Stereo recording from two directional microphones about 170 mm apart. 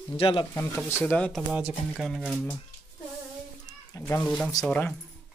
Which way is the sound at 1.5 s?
5° right (ahead or behind).